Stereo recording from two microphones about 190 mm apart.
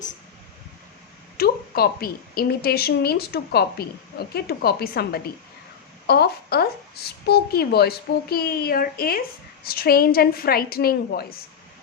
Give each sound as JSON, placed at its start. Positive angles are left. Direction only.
{"t": 1.4, "sound": "a woman's voice", "side_deg": 55}